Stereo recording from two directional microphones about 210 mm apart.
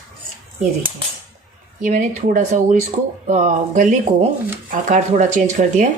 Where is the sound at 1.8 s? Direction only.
35° right (ahead or behind).